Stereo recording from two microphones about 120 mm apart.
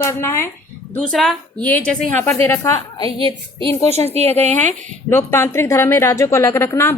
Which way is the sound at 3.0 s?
35° left (ahead or behind).